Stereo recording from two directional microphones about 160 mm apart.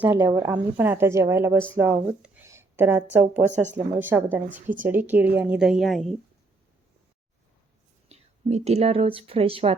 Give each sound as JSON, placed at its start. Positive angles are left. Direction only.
{"t": 0.0, "sound": "a woman's voice", "side_deg": -15}
{"t": 8.1, "sound": "speech", "side_deg": -40}